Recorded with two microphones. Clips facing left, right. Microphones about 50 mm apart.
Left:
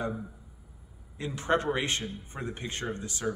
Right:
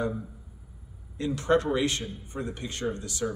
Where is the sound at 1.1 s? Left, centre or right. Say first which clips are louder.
Right 4 dB; left.